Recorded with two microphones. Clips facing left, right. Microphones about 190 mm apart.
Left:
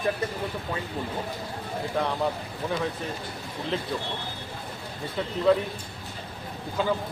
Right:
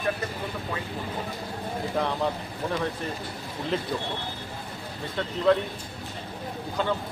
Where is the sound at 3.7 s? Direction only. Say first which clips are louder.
Right 2 dB; centre (ahead or behind).